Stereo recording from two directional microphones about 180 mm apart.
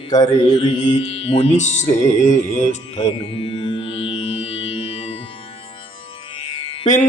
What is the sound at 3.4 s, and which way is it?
Music, 30° left (ahead or behind).